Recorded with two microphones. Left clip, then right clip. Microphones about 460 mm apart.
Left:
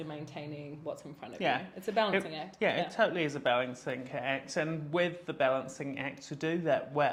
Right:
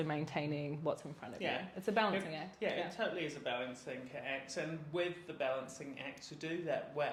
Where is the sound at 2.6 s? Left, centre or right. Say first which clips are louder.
Left 9 dB; left.